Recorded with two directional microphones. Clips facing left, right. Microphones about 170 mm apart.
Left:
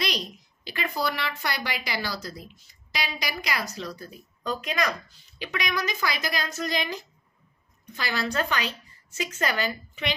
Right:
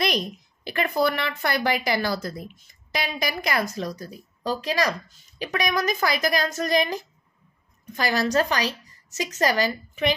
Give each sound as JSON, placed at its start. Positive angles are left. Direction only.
{"t": 0.0, "sound": "speech", "side_deg": -50}
{"t": 5.4, "sound": "a woman's voice", "side_deg": -45}